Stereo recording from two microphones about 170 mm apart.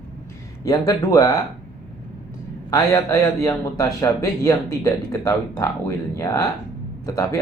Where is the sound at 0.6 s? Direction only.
20° left (ahead or behind).